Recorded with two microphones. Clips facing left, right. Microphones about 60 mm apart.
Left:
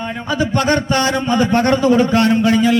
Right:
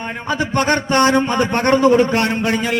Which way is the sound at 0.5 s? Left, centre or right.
Right.